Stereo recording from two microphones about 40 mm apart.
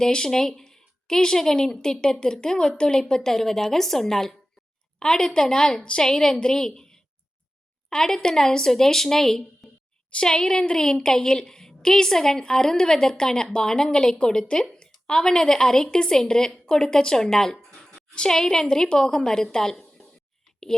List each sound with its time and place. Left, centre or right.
0.0 s a woman's voice: centre
10.1 s a woman's voice: left